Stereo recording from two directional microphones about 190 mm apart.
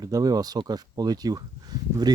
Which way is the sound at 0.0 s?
20° right (ahead or behind).